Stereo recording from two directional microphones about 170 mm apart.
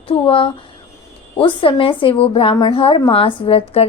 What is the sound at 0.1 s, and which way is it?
A woman's voice, 30° left (ahead or behind).